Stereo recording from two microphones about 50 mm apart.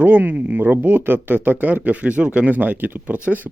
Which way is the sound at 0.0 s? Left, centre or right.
Right.